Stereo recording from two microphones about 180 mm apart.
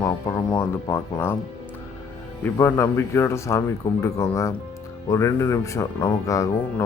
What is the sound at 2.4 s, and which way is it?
Speech, 10° left (ahead or behind).